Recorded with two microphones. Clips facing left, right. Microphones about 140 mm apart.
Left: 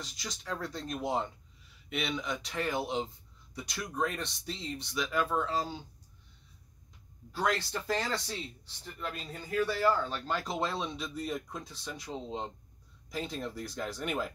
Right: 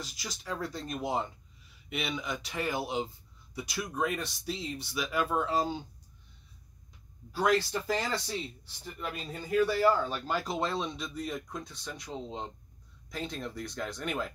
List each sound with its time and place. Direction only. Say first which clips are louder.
0.0 s speech: right 1 dB; 5° right (ahead or behind)
7.3 s speech: right 4 dB; 10° right (ahead or behind)